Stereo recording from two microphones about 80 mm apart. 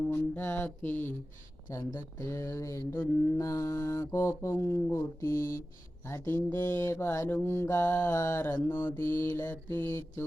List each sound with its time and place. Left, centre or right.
0.1 s mantra: left
1.7 s mantra: left